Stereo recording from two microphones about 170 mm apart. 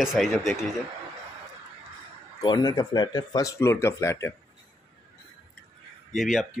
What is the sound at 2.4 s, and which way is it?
Speech, 25° left (ahead or behind).